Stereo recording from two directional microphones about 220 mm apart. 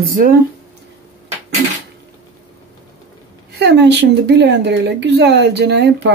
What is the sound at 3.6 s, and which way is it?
Speech, 50° right (ahead or behind).